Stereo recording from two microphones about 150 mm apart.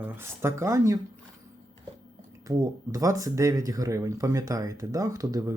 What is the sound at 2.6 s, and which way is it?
Speech, 20° right (ahead or behind).